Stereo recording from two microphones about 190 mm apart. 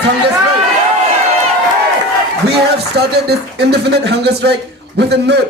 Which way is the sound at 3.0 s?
60° right (ahead or behind).